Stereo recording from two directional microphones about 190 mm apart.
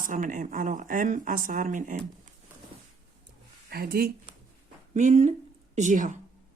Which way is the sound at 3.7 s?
55° right (ahead or behind).